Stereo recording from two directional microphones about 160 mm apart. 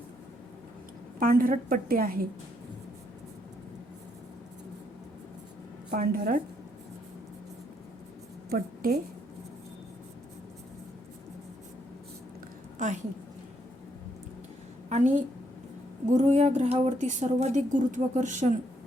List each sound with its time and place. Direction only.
1.2 s a woman's voice: 60° right (ahead or behind)
5.9 s a woman's voice: 65° right (ahead or behind)
8.4 s a woman's voice: 70° right (ahead or behind)
12.8 s a woman's voice: 50° right (ahead or behind)
14.8 s a woman's voice: 50° right (ahead or behind)